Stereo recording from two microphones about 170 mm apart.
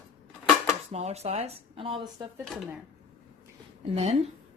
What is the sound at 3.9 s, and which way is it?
Speech, 35° right (ahead or behind).